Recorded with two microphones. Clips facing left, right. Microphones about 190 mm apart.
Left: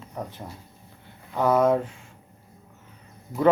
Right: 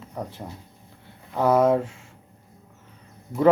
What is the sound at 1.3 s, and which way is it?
Speech, 25° right (ahead or behind).